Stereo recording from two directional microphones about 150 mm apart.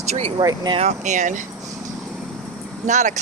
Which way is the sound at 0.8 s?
50° right (ahead or behind).